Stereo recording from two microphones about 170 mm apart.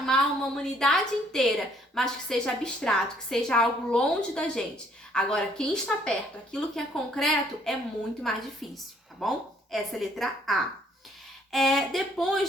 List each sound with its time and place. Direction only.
0.0 s a woman's voice: 5° left (ahead or behind)